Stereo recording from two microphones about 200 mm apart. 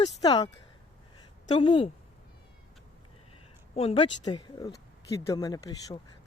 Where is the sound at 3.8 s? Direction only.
25° left (ahead or behind).